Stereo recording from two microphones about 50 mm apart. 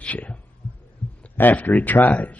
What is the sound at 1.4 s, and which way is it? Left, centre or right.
A man's voice, left.